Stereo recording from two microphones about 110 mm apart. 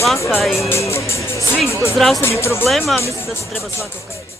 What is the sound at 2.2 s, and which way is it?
Speech, 25° left (ahead or behind).